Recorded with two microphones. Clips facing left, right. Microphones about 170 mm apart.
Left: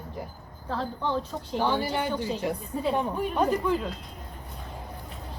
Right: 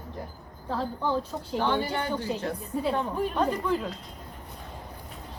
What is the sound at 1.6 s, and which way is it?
A woman's voice, 10° left (ahead or behind).